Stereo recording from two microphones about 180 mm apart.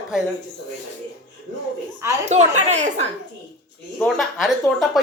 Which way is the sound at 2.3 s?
40° right (ahead or behind).